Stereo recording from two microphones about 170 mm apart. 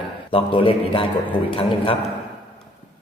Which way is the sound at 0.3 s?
30° left (ahead or behind).